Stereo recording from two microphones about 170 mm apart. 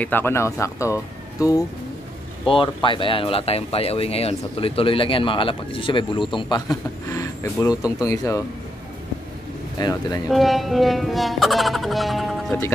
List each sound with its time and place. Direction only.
0.0 s speech: 10° left (ahead or behind)
2.4 s speech: 30° left (ahead or behind)
10.3 s music: centre (ahead or behind)